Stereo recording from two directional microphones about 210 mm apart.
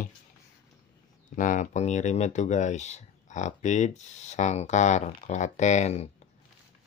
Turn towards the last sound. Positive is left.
turn(degrees=35)  # may be behind; listen again after turning